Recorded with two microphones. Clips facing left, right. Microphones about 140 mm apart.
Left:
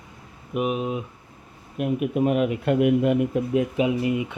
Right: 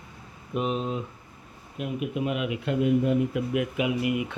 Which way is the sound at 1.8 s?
50° left (ahead or behind).